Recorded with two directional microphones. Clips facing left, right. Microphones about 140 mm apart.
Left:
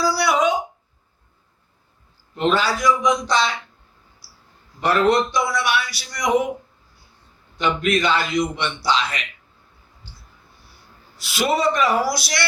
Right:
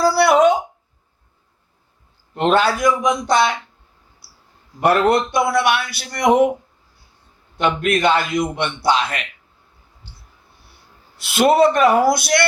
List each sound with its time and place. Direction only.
0.0 s a sound: 55° right (ahead or behind)
2.3 s a man's voice: 55° right (ahead or behind)
4.8 s a man's voice: 55° right (ahead or behind)
7.5 s a man's voice: 55° right (ahead or behind)
11.2 s a man's voice: 55° right (ahead or behind)